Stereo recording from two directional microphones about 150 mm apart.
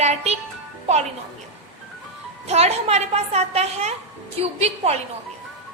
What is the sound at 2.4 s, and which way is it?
A woman's voice, 45° right (ahead or behind).